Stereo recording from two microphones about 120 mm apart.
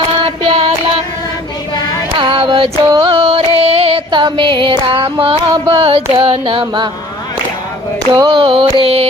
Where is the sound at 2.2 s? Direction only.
45° right (ahead or behind).